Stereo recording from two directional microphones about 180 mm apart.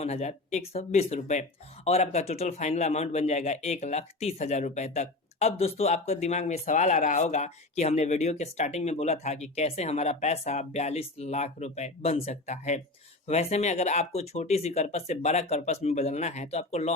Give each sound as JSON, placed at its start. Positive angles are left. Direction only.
{"t": 0.0, "sound": "speech", "side_deg": 40}